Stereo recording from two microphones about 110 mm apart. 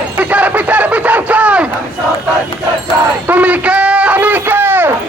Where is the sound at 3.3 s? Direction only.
15° right (ahead or behind).